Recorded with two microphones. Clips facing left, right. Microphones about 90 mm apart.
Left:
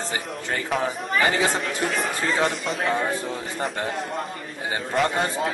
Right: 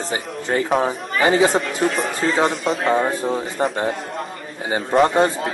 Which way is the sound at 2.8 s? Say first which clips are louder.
Right 5 dB; 35° right (ahead or behind).